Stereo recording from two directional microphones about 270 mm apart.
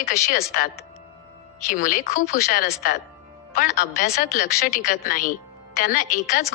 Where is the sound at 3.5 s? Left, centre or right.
Left.